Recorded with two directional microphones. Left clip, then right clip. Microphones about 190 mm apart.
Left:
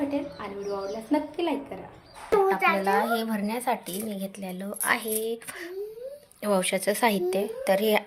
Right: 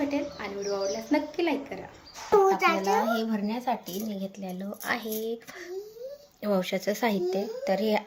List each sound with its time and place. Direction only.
0.1 s speech: centre (ahead or behind)
2.6 s a child's voice: 70° right (ahead or behind)
3.0 s speech: 10° left (ahead or behind)
6.4 s speech: 10° right (ahead or behind)